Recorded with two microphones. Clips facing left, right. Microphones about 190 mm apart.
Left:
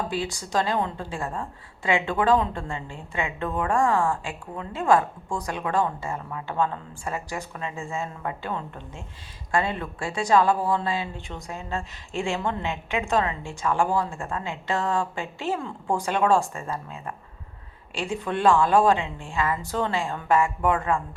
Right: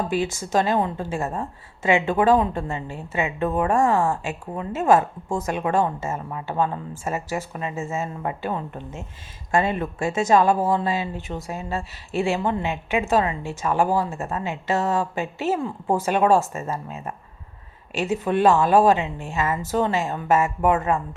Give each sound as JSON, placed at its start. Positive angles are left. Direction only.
{"t": 0.1, "sound": "a woman's voice", "side_deg": -20}
{"t": 18.3, "sound": "a woman's voice", "side_deg": -20}